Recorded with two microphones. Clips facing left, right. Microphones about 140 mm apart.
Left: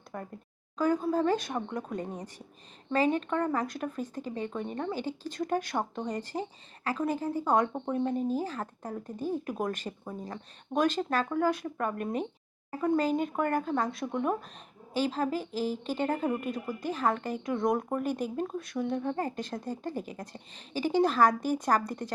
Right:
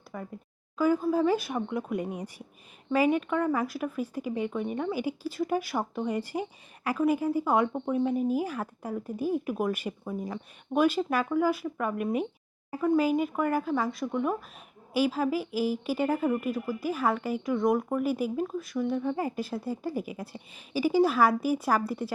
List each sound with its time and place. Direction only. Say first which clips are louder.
0.1 s speech: right 1 dB; centre (ahead or behind)